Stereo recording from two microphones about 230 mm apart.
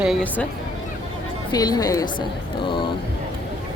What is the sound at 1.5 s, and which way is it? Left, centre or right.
Speech, centre.